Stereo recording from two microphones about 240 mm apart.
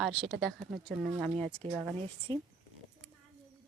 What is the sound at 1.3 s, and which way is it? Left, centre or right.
Speech, right.